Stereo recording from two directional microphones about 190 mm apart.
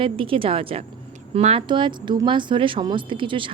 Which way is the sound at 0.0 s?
30° right (ahead or behind).